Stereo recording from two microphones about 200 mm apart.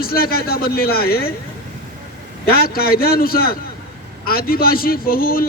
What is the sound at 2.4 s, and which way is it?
A man's voice, 50° left (ahead or behind).